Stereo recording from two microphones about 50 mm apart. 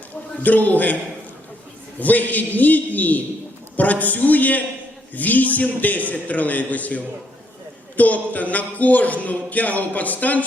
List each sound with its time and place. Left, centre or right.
0.4 s a man's voice: left
2.0 s a man's voice: left